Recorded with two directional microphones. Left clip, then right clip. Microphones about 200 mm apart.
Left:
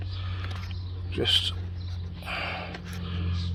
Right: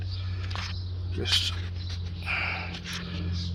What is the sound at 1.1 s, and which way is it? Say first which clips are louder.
Speech: left 2 dB; 40° left (ahead or behind).